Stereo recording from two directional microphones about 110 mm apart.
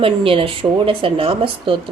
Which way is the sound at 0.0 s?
55° right (ahead or behind).